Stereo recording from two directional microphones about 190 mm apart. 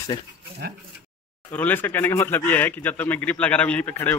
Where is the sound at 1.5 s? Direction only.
10° left (ahead or behind).